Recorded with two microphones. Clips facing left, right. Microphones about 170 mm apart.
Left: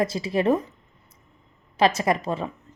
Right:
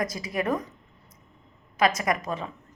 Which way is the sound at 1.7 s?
30° left (ahead or behind).